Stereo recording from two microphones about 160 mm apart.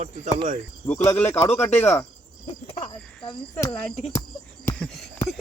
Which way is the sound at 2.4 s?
35° left (ahead or behind).